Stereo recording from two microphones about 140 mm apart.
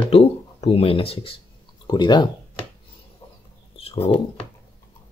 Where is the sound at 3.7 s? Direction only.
45° left (ahead or behind).